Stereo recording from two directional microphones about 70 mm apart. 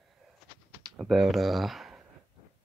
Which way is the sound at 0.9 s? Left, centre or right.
Centre.